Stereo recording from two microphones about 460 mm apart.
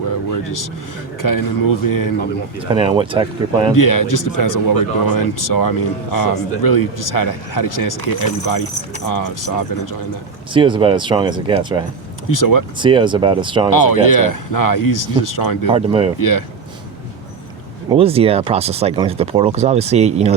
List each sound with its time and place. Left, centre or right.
0.3 s vehicle: left
1.2 s speech: left
2.6 s speech: centre
3.8 s speech: left
9.0 s speech: left
10.5 s speech: centre
12.3 s speech: left
12.8 s speech: centre
13.7 s speech: left
15.6 s speech: centre
17.8 s speech: centre